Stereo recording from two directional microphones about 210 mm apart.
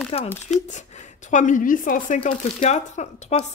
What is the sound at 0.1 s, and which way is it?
Speech, 30° left (ahead or behind).